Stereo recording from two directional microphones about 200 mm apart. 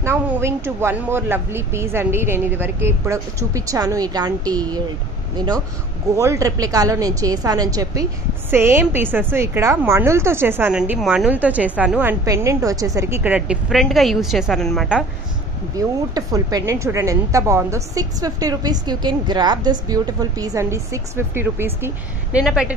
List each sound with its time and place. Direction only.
0.0 s a woman's voice: 15° right (ahead or behind)
6.1 s a woman's voice: 15° right (ahead or behind)
15.8 s a woman's voice: 15° right (ahead or behind)